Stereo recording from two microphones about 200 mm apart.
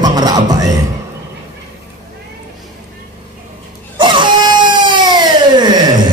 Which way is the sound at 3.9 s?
25° right (ahead or behind).